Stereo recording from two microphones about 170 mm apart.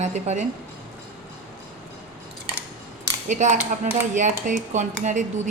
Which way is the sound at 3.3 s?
45° right (ahead or behind).